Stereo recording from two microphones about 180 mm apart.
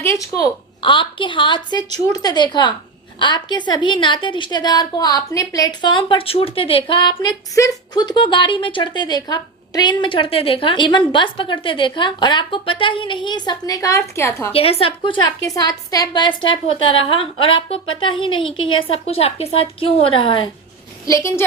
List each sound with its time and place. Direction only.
0.0 s a woman's voice: 15° left (ahead or behind)
14.5 s a woman's voice: 30° left (ahead or behind)
21.1 s a woman's voice: 15° left (ahead or behind)